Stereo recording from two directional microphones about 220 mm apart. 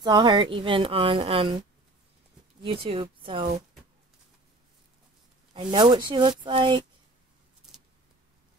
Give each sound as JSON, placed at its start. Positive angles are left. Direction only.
{"t": 0.0, "sound": "speech", "side_deg": -20}
{"t": 2.6, "sound": "speech", "side_deg": -25}
{"t": 5.5, "sound": "speech", "side_deg": -20}